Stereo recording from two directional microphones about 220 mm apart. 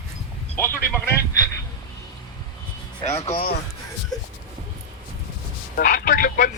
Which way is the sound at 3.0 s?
30° left (ahead or behind).